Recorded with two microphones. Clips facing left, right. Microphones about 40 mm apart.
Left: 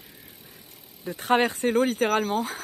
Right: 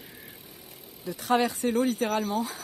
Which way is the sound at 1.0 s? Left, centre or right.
Left.